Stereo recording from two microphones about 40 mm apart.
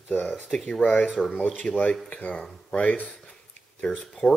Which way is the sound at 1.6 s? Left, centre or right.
Left.